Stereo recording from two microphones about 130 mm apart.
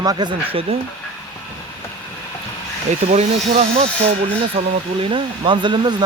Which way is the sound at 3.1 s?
60° right (ahead or behind).